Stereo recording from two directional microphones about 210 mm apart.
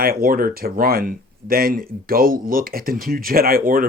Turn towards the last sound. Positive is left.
turn(degrees=-45)  # may be behind; listen again after turning